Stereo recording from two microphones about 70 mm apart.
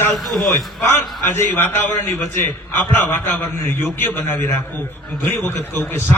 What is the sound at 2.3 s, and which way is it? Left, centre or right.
A man's voice, left.